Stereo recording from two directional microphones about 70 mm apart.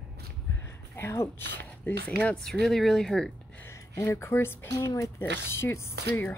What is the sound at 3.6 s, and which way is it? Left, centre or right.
Speech, left.